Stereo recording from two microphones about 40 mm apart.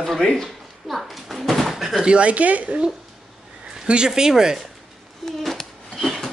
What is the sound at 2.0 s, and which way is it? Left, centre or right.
Speech, right.